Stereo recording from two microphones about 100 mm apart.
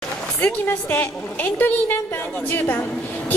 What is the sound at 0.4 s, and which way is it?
A woman's voice, 20° left (ahead or behind).